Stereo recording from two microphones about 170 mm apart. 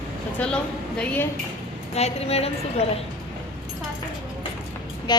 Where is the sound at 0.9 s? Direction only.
10° left (ahead or behind).